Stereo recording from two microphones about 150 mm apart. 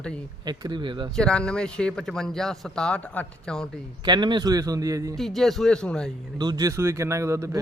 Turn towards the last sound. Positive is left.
turn(degrees=-20)  # may be behind; listen again after turning